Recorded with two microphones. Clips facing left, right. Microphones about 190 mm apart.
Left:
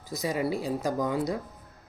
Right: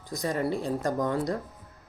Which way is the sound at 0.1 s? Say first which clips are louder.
Even; 5° left (ahead or behind).